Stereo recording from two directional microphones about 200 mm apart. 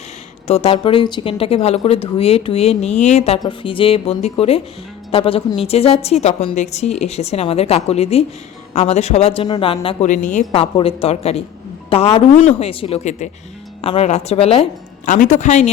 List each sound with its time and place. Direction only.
0.4 s a woman's voice: 30° left (ahead or behind)
10.1 s a woman's voice: 40° left (ahead or behind)